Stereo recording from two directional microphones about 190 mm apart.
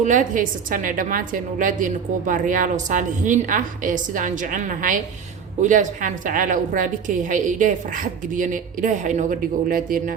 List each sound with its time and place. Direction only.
0.0 s a woman's voice: 40° right (ahead or behind)